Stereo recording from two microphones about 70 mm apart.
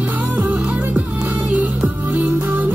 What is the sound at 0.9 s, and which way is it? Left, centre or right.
Music, right.